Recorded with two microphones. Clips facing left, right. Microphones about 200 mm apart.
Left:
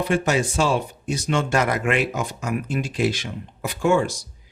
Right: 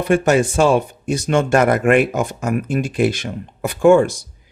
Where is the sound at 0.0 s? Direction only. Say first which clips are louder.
Right 6 dB; 55° right (ahead or behind).